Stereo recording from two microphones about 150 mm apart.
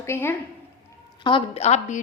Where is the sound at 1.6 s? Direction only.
45° left (ahead or behind).